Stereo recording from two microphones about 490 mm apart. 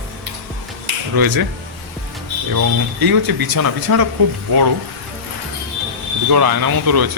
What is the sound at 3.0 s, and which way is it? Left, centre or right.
Speech, right.